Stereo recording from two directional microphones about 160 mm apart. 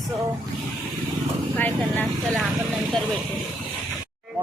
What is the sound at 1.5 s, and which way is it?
Speech, 10° left (ahead or behind).